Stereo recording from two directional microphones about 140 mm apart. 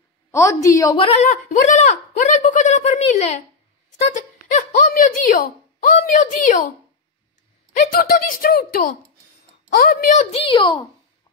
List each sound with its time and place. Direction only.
0.3 s a woman's voice: 20° left (ahead or behind)
0.9 s speech: 45° left (ahead or behind)
4.1 s speech: 70° left (ahead or behind)
7.9 s speech: 85° left
10.3 s a child's voice: 40° left (ahead or behind)